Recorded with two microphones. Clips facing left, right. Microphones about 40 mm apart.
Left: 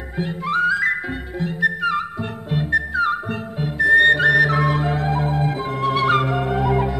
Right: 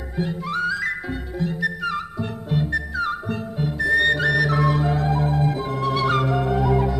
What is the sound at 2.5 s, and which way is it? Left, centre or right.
Music, left.